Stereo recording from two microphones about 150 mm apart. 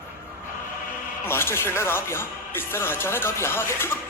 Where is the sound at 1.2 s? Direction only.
15° left (ahead or behind).